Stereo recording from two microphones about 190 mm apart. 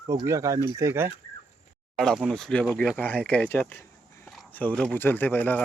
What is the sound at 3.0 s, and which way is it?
Speech, 10° left (ahead or behind).